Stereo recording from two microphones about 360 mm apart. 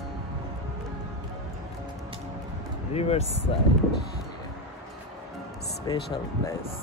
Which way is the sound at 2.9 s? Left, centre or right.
Centre.